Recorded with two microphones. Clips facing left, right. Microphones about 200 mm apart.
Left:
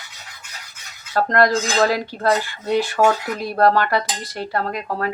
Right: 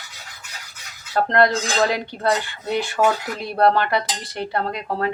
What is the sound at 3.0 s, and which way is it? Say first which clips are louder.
Speech: left 2 dB; 5° right (ahead or behind).